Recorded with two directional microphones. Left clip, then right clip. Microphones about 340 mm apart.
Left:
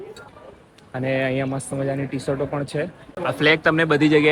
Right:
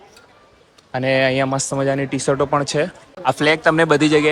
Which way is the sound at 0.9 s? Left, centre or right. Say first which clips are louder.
Right 6 dB; centre.